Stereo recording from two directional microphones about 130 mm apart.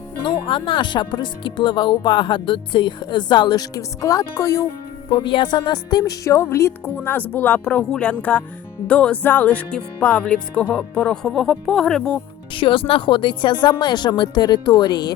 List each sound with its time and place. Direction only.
0.3 s speech: 40° left (ahead or behind); by 4.6 s 25° left (ahead or behind)
5.0 s speech: 40° left (ahead or behind); by 12.2 s 5° left (ahead or behind)
12.5 s speech: 40° left (ahead or behind)